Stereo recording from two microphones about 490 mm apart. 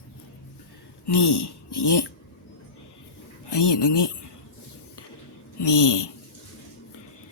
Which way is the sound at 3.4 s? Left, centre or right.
Left.